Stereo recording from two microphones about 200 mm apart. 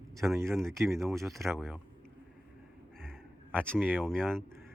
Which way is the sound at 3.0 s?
5° left (ahead or behind).